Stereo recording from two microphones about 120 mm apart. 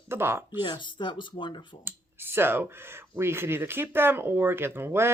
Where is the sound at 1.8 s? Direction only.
20° right (ahead or behind).